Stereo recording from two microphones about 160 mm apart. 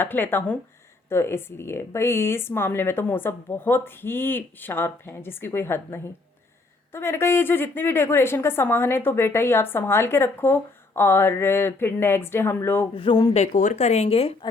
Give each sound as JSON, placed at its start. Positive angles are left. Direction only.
{"t": 0.0, "sound": "a woman's voice", "side_deg": 10}
{"t": 12.9, "sound": "speech", "side_deg": 30}
{"t": 13.3, "sound": "speech", "side_deg": 45}